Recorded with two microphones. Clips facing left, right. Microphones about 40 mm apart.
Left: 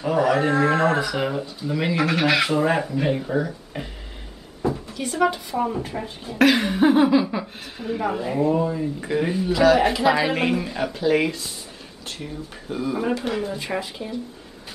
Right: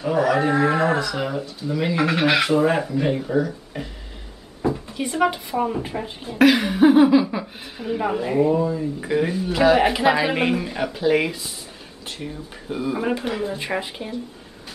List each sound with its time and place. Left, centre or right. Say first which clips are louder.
0.0 s speech: even; centre
0.5 s speech: even; centre
0.9 s speech: left 1 dB; centre
2.1 s speech: right 1 dB; centre
2.4 s speech: right 2 dB; centre
4.6 s speech: right 2 dB; centre
8.5 s speech: right 1 dB; centre
9.0 s speech: right 2 dB; centre
9.5 s speech: even; centre
10.1 s speech: right 1 dB; centre
13.7 s speech: right 1 dB; right